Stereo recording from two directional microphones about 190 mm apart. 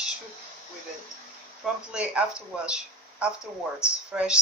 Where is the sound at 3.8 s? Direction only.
5° right (ahead or behind).